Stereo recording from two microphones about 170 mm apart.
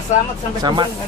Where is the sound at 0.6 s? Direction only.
25° right (ahead or behind).